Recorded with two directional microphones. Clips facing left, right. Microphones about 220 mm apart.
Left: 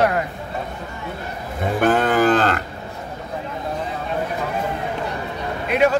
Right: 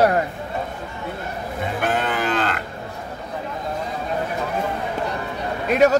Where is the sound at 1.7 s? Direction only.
45° left (ahead or behind).